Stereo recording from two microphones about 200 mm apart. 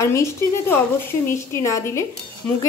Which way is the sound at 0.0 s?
15° left (ahead or behind).